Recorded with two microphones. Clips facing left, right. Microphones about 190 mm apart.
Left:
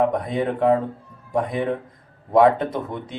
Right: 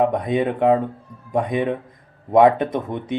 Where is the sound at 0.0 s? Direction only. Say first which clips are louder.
Right 2 dB; 20° right (ahead or behind).